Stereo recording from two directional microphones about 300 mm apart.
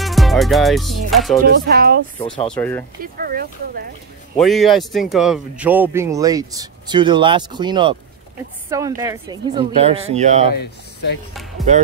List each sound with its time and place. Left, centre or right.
0.0 s music: centre
1.1 s speech: centre
1.4 s speech: right
2.1 s speech: centre
2.4 s speech: centre
3.0 s speech: right
4.4 s speech: centre; by 10.5 s right
10.5 s speech: left